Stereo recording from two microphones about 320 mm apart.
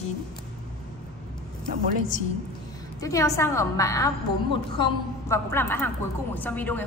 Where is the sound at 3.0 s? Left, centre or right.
Centre.